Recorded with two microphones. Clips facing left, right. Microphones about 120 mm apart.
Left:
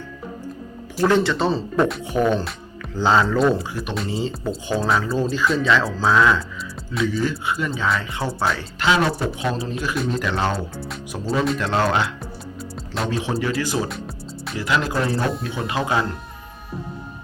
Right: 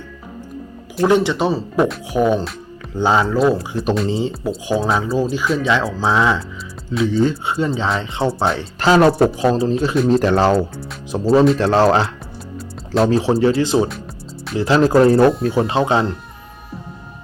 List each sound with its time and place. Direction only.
1.0 s speech: 15° right (ahead or behind)
3.3 s speech: 5° right (ahead or behind)
3.7 s speech: 30° right (ahead or behind)
4.1 s speech: 15° right (ahead or behind)
8.8 s speech: 40° right (ahead or behind)
9.4 s speech: 35° right (ahead or behind)
14.6 s speech: 35° right (ahead or behind)